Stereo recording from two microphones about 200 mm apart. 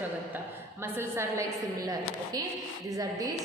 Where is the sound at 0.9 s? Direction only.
10° right (ahead or behind).